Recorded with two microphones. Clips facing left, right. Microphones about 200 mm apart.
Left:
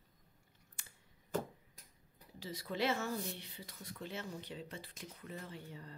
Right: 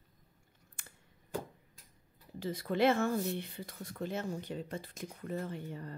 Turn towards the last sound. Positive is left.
turn(degrees=-55)  # may be behind; listen again after turning